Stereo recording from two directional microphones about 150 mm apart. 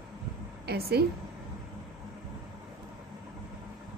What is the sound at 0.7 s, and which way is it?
Speech, 90° right.